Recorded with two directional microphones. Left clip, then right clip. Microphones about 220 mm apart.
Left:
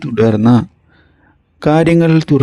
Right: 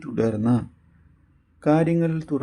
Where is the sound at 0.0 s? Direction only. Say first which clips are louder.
Left 12 dB; 35° left (ahead or behind).